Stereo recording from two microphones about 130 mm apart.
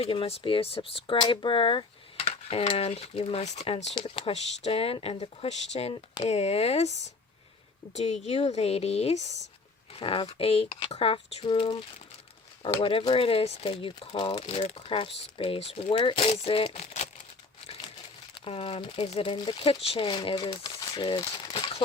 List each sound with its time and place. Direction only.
0.0 s speech: 45° left (ahead or behind)
3.9 s a woman's voice: 45° left (ahead or behind)
9.9 s speech: 40° left (ahead or behind); by 17.1 s 55° left (ahead or behind)
18.3 s speech: 50° left (ahead or behind)